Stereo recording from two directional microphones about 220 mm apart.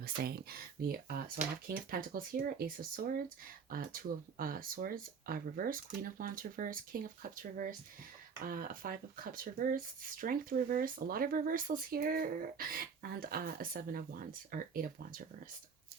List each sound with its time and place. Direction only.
0.0 s speech: 45° right (ahead or behind)